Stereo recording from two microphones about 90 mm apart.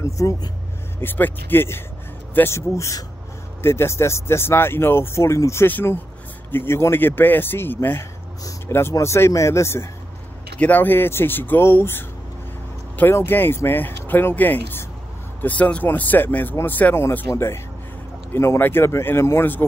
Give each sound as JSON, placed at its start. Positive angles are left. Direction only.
{"t": 0.0, "sound": "speech", "side_deg": 40}
{"t": 1.0, "sound": "speech", "side_deg": 20}
{"t": 5.7, "sound": "speech", "side_deg": 20}
{"t": 13.1, "sound": "speech", "side_deg": 25}